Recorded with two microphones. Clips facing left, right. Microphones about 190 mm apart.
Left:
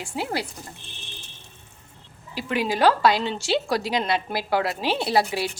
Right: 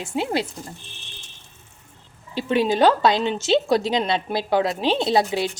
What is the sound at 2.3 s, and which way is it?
A woman's voice, 25° right (ahead or behind).